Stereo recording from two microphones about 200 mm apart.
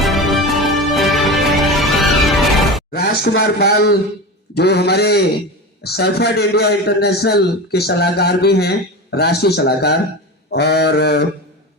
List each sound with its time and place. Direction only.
0.0 s music: centre (ahead or behind)
2.9 s a sound: 50° left (ahead or behind)
3.4 s a man's voice: 55° left (ahead or behind)